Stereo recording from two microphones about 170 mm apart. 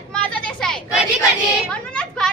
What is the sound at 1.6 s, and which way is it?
Children playing, 5° left (ahead or behind).